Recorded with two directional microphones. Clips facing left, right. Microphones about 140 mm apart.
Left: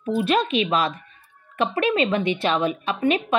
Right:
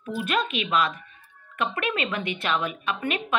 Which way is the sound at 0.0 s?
30° left (ahead or behind).